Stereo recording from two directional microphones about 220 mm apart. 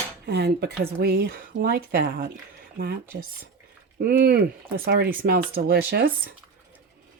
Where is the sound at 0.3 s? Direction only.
50° right (ahead or behind).